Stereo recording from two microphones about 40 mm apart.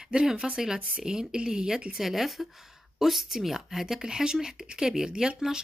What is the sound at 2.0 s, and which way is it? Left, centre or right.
Speech, centre.